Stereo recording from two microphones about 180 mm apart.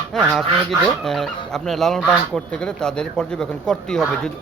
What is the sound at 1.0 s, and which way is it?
Speech, centre (ahead or behind).